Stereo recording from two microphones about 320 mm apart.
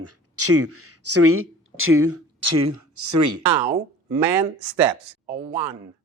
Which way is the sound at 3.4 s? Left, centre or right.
Centre.